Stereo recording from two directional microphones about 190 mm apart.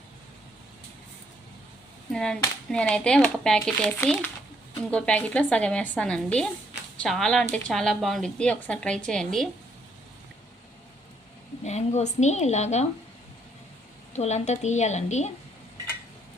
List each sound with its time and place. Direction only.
2.1 s a woman's voice: 5° left (ahead or behind)
11.6 s a woman's voice: 35° left (ahead or behind)
14.1 s a woman's voice: 35° left (ahead or behind)